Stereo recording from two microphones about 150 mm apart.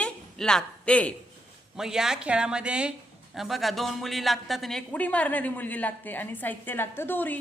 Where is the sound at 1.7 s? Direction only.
5° right (ahead or behind).